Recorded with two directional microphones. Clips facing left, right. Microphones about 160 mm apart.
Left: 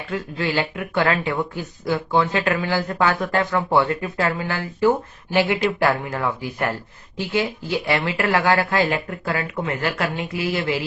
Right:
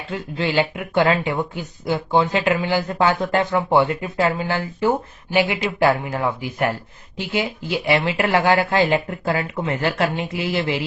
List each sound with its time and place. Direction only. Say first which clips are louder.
0.1 s speech: right 1 dB; 20° right (ahead or behind)